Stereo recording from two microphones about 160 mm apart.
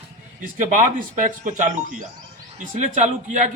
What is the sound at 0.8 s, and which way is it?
Speech, 55° right (ahead or behind).